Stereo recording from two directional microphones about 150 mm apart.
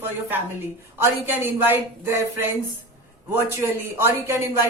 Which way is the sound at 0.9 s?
15° right (ahead or behind).